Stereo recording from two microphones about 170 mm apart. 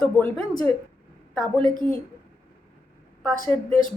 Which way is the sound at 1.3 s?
5° left (ahead or behind).